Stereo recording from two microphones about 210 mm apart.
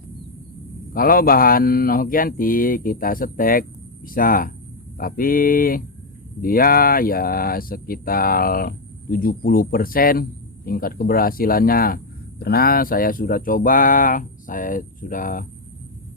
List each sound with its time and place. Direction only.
0.9 s speech: 45° left (ahead or behind)